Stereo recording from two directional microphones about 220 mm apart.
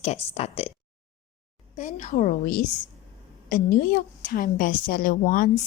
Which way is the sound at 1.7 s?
35° left (ahead or behind).